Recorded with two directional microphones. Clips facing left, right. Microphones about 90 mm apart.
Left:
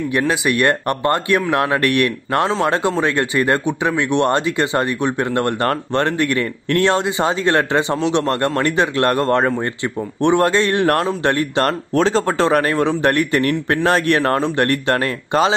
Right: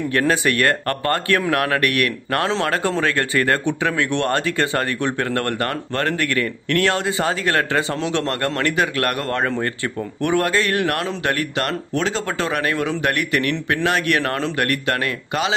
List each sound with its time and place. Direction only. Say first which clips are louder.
0.3 s speech: left 2 dB; 20° left (ahead or behind); by 15.5 s 35° left (ahead or behind)